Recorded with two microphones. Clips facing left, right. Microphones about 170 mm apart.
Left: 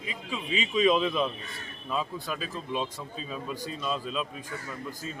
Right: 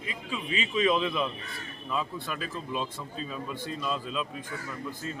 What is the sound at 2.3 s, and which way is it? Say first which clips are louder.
Speech: left 2 dB; 20° left (ahead or behind).